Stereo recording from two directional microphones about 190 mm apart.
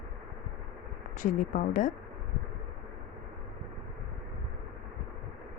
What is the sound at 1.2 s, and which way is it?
Speech, 45° left (ahead or behind).